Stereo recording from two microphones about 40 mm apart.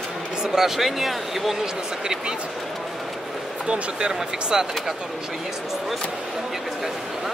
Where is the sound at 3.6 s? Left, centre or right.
Right.